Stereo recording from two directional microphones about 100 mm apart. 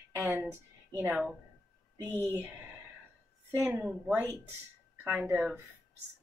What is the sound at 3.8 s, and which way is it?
Speech, 10° right (ahead or behind).